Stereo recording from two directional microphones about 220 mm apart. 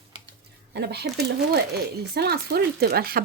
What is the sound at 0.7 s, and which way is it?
Speech, 50° right (ahead or behind).